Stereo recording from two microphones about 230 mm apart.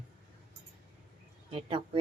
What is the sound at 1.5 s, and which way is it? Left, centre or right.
Speech, right.